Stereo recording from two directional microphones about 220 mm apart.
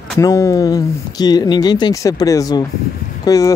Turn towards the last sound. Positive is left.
turn(degrees=15)  # may be behind; listen again after turning